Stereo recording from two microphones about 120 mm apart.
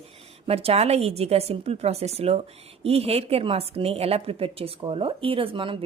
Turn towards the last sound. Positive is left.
turn(degrees=-45)  # may be behind; listen again after turning